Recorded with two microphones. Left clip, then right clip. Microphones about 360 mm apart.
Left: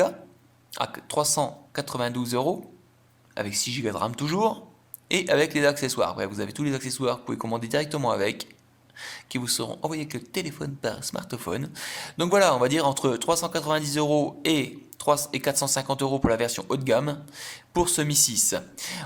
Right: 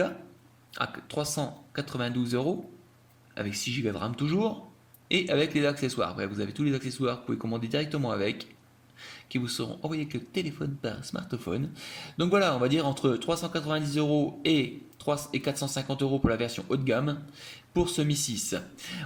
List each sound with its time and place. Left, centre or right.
0.7 s speech: centre